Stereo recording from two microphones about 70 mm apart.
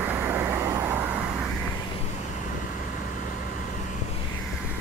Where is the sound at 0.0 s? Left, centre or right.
Right.